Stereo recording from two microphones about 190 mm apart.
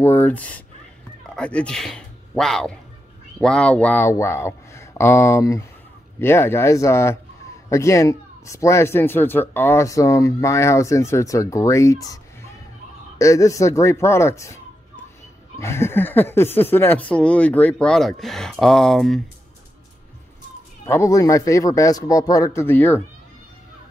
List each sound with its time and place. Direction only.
0.0 s speech: 10° left (ahead or behind)
13.2 s speech: 15° left (ahead or behind)
15.6 s speech: 15° left (ahead or behind)
20.8 s speech: 15° left (ahead or behind)